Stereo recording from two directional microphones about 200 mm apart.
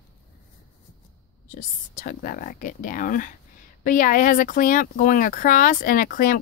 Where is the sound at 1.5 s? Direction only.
40° left (ahead or behind).